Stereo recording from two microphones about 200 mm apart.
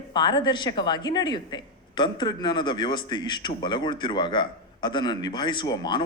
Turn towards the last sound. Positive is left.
turn(degrees=20)  # may be behind; listen again after turning